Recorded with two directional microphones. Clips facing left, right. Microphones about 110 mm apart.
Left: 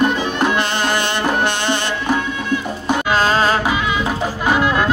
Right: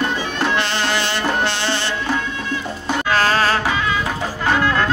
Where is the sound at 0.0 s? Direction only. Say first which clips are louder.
Left 4 dB; 15° left (ahead or behind).